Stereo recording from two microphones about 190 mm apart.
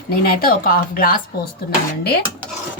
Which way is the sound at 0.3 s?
50° left (ahead or behind).